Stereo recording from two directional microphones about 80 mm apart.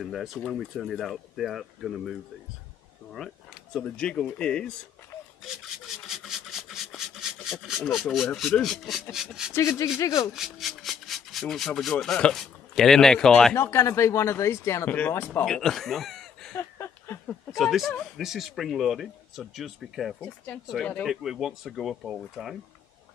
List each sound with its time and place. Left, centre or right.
0.0 s speech: centre
3.2 s speech: centre
5.4 s rub: centre
8.4 s speech: centre
9.9 s speech: left
10.3 s speech: centre
13.6 s speech: left
14.9 s speech: left
15.4 s speech: centre
16.5 s a sound: left
17.6 s speech: centre
20.2 s speech: left
21.0 s speech: centre